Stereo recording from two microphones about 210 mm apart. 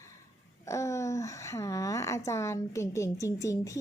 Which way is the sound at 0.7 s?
15° left (ahead or behind).